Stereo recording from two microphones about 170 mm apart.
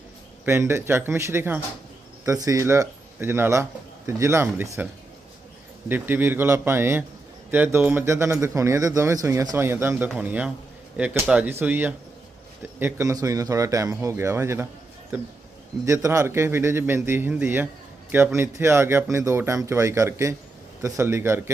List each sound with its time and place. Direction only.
0.4 s a man's voice: 15° right (ahead or behind)
5.9 s a man's voice: 10° right (ahead or behind)